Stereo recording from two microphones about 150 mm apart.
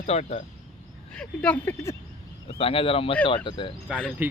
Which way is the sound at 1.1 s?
10° left (ahead or behind).